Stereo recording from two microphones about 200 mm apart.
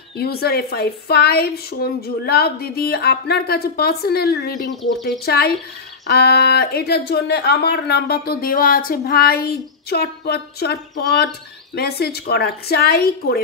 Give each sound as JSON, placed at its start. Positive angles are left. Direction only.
{"t": 0.2, "sound": "speech", "side_deg": 50}